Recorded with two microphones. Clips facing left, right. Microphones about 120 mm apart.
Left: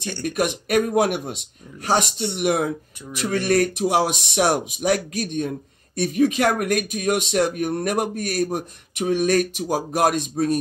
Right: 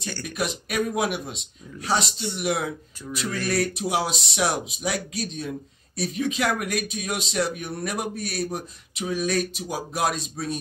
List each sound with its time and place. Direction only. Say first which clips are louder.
0.2 s speech: left 7 dB; 50° left (ahead or behind)